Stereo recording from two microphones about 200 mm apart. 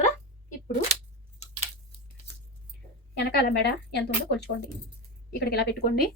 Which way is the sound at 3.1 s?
55° left (ahead or behind).